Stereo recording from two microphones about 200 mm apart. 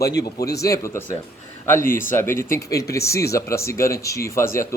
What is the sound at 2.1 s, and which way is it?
Speech, 10° left (ahead or behind).